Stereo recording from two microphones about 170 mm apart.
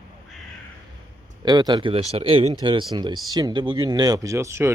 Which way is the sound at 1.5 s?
25° right (ahead or behind).